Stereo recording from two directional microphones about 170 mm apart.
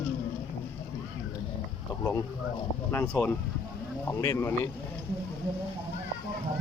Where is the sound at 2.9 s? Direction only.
5° left (ahead or behind).